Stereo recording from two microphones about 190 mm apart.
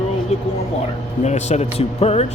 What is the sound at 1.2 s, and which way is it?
Speech, 35° left (ahead or behind).